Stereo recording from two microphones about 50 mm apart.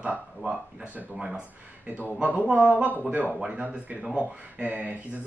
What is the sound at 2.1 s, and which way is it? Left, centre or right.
Speech, right.